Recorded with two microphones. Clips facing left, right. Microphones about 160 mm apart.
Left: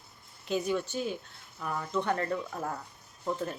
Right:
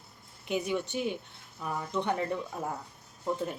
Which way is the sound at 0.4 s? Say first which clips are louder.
Left 1 dB; 15° right (ahead or behind).